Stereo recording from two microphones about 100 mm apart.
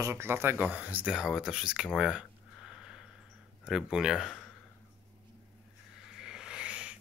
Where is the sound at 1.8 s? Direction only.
5° right (ahead or behind).